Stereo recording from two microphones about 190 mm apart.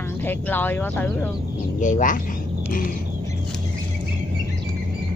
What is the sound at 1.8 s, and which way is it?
Speech, 45° left (ahead or behind).